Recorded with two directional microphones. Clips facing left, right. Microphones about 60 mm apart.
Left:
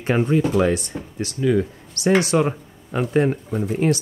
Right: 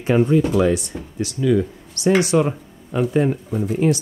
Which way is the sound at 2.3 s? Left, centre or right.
Left.